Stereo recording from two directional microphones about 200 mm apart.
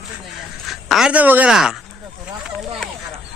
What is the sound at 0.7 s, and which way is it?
Speech, centre (ahead or behind).